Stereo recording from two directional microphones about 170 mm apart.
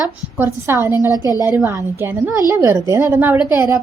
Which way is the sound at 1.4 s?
10° right (ahead or behind).